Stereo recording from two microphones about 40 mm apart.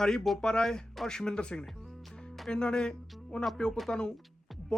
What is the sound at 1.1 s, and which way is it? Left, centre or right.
Speech, centre.